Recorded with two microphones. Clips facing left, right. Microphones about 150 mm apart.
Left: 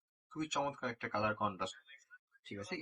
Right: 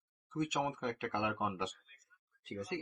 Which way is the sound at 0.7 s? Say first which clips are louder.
Right 3 dB; 15° right (ahead or behind).